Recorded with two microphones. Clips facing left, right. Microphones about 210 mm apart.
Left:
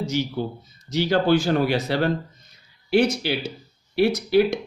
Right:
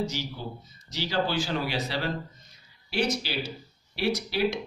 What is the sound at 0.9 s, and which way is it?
Speech, 55° left (ahead or behind).